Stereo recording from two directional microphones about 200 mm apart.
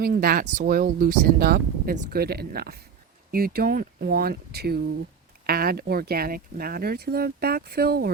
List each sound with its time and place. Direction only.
0.0 s speech: 50° right (ahead or behind)